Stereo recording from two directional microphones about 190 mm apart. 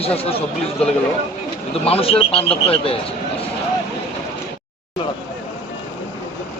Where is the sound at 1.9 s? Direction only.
30° left (ahead or behind).